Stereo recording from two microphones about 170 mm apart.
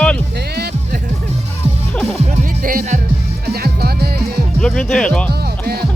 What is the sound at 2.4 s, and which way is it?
Music, 55° right (ahead or behind).